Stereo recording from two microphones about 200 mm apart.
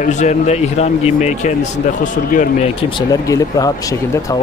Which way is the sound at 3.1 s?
15° left (ahead or behind).